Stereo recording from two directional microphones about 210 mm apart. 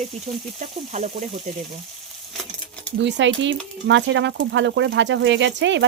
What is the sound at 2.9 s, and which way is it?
A woman's voice, 60° right (ahead or behind).